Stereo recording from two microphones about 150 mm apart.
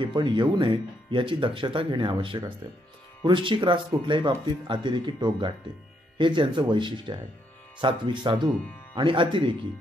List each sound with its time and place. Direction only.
0.0 s speech: 30° right (ahead or behind)